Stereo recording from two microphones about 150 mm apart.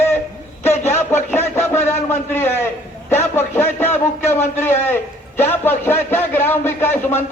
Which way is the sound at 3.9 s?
50° left (ahead or behind).